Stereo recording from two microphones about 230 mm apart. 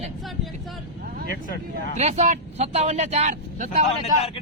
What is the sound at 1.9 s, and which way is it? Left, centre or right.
Speech, right.